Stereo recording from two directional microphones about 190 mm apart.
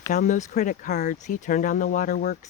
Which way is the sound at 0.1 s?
40° left (ahead or behind).